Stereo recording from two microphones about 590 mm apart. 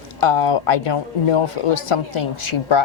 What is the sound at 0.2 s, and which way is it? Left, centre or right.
Speech, left.